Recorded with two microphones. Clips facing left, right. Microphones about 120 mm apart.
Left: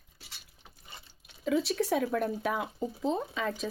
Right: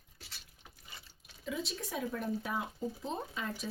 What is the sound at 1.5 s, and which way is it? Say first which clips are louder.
Speech: left 11 dB; 65° left (ahead or behind).